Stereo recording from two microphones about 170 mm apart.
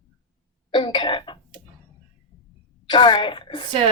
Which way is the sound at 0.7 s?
25° left (ahead or behind).